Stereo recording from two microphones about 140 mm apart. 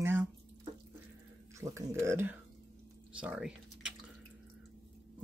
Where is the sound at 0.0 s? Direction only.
15° right (ahead or behind).